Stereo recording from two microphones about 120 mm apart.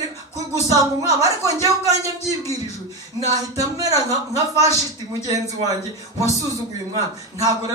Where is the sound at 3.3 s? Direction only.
30° right (ahead or behind).